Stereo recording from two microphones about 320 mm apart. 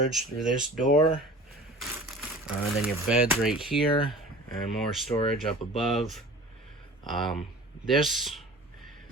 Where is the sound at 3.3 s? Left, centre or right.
Centre.